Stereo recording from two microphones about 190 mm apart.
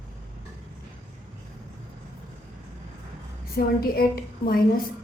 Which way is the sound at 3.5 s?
55° left (ahead or behind).